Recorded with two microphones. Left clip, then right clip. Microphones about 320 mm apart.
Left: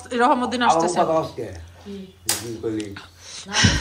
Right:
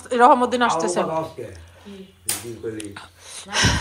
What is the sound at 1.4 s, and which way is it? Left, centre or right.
Speech, left.